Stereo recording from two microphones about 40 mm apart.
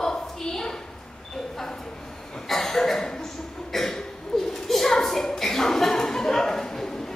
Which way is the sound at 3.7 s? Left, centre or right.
Centre.